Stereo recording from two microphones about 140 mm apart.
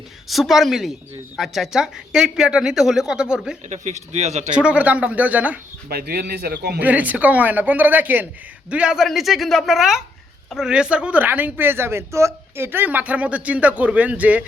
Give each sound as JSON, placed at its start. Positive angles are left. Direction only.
{"t": 0.3, "sound": "speech", "side_deg": 0}
{"t": 3.7, "sound": "speech", "side_deg": -55}
{"t": 4.5, "sound": "speech", "side_deg": -10}
{"t": 5.9, "sound": "a man's voice", "side_deg": -90}
{"t": 6.7, "sound": "speech", "side_deg": -10}